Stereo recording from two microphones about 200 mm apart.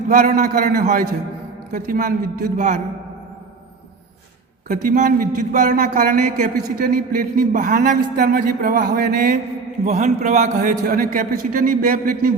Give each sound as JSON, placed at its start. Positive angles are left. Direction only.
{"t": 0.1, "sound": "speech", "side_deg": -45}
{"t": 4.7, "sound": "a man's voice", "side_deg": -40}